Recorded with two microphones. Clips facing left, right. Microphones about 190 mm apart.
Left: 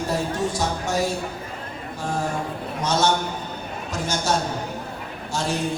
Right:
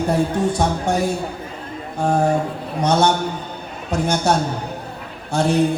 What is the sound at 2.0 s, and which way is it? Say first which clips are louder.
A man's voice: right 9 dB; 55° right (ahead or behind).